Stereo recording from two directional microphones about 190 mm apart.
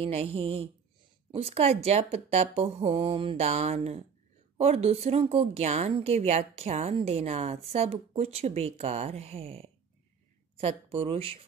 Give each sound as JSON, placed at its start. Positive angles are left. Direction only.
{"t": 0.0, "sound": "a woman's voice", "side_deg": -30}